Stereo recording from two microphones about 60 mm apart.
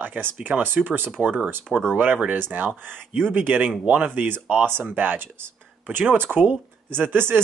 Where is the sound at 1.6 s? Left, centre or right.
Centre.